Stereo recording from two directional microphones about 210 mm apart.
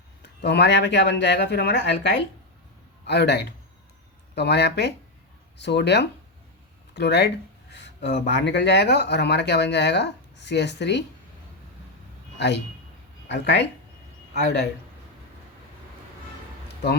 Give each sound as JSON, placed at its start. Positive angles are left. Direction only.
{"t": 0.2, "sound": "speech", "side_deg": 55}
{"t": 7.7, "sound": "a sound", "side_deg": 55}
{"t": 8.3, "sound": "speech", "side_deg": 55}
{"t": 12.4, "sound": "speech", "side_deg": 55}